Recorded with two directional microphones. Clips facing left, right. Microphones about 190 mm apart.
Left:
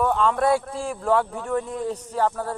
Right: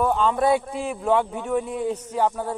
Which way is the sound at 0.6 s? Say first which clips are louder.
Right 1 dB; 20° right (ahead or behind).